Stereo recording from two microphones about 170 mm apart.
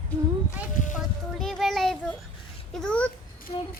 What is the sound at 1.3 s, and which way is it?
Child singing, centre (ahead or behind).